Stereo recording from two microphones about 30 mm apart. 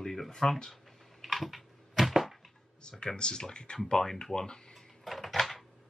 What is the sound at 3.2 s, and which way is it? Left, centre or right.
Speech, left.